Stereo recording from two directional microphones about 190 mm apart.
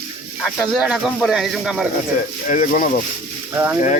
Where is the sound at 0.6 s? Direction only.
Centre (ahead or behind).